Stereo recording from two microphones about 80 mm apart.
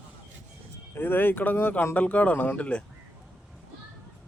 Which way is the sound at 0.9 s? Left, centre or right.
Left.